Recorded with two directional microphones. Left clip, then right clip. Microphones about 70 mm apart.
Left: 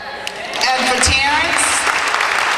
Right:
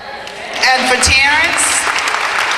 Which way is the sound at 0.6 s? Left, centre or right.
Right.